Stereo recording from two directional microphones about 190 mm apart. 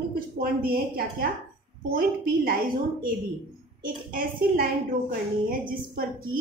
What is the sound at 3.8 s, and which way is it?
A woman's voice, 50° right (ahead or behind).